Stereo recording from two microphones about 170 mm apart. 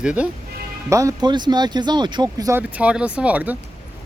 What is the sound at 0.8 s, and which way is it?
Speech, 20° right (ahead or behind).